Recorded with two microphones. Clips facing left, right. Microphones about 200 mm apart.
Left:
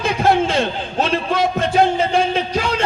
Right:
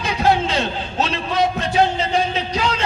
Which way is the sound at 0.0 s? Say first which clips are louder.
Left 2 dB; 50° left (ahead or behind).